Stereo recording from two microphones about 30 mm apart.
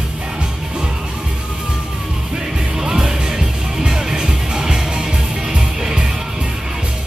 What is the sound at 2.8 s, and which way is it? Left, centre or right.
Music, centre.